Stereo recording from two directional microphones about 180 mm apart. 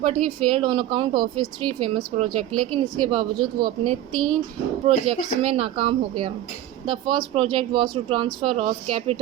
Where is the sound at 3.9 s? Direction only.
Centre (ahead or behind).